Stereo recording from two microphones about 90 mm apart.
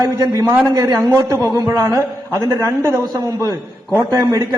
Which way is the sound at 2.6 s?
30° right (ahead or behind).